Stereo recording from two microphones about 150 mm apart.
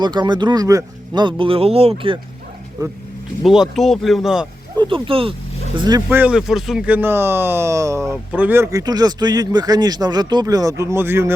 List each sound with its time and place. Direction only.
0.0 s speech: 30° right (ahead or behind)
1.4 s speech: 40° right (ahead or behind)
2.8 s speech: 25° right (ahead or behind)
3.4 s speech: centre (ahead or behind)
4.8 s speech: 35° right (ahead or behind)
6.1 s speech: 10° right (ahead or behind)
8.1 s speech: 10° right (ahead or behind)